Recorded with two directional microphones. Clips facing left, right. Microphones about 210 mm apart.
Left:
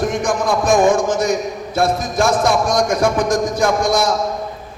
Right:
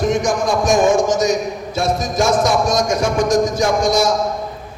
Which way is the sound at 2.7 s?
55° left (ahead or behind).